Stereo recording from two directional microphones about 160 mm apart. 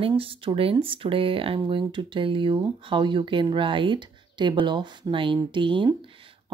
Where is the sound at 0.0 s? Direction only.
35° right (ahead or behind).